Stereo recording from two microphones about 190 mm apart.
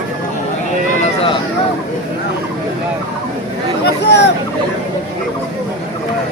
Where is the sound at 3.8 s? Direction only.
65° left (ahead or behind).